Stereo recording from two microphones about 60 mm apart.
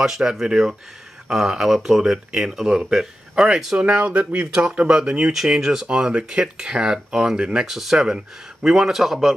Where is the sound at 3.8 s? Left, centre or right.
Centre.